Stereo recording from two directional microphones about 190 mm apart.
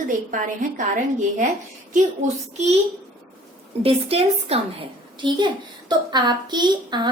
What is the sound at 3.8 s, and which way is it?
A woman's voice, 30° right (ahead or behind).